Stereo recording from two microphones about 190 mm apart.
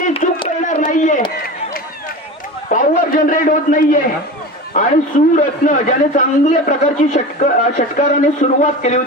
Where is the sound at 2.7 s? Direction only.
45° left (ahead or behind).